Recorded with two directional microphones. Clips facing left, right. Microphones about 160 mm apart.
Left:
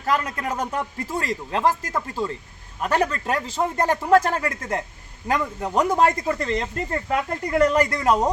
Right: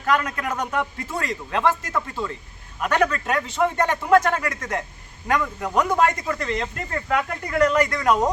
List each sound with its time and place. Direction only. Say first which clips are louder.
0.0 s a man's voice: right 1 dB; 30° left (ahead or behind)